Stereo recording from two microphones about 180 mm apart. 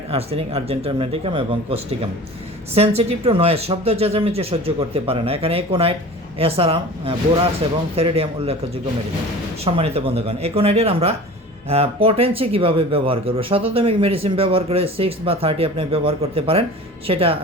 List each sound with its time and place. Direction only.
0.1 s speech: 35° right (ahead or behind)